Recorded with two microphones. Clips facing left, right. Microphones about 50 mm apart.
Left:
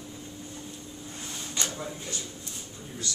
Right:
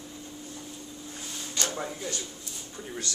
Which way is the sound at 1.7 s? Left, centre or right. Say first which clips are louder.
Right 3 dB; right.